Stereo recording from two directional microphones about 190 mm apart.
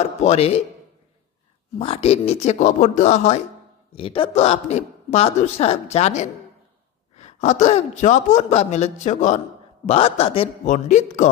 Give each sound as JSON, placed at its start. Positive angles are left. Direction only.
{"t": 0.0, "sound": "speech", "side_deg": 35}
{"t": 1.8, "sound": "a woman's voice", "side_deg": 30}